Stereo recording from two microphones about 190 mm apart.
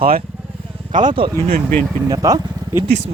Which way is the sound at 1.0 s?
25° right (ahead or behind).